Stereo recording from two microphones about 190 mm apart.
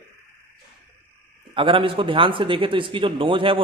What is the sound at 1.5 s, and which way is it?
Speech, 25° right (ahead or behind).